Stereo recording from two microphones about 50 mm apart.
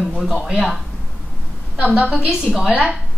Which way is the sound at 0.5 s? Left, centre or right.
Centre.